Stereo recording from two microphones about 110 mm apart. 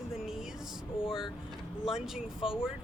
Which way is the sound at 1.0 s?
50° left (ahead or behind).